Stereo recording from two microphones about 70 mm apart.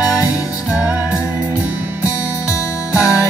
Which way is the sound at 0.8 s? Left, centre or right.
Centre.